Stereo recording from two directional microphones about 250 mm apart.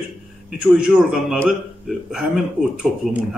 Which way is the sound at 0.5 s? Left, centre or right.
Centre.